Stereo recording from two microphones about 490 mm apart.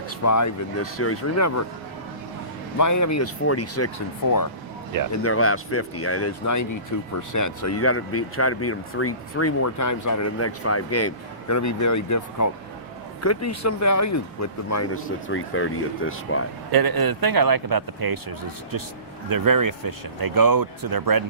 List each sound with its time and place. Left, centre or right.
0.3 s speech: left
2.7 s speech: left
5.1 s speech: left
16.7 s speech: right
19.3 s speech: right